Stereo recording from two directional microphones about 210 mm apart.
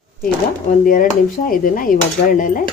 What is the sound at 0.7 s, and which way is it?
Speech, 40° left (ahead or behind).